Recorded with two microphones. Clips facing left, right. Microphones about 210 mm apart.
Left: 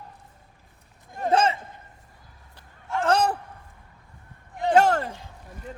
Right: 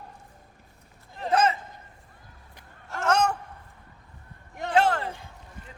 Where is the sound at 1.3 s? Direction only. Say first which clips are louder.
Left 1 dB; 30° left (ahead or behind).